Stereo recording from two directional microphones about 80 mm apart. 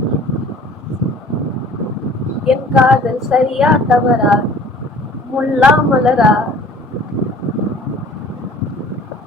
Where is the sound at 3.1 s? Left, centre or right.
Centre.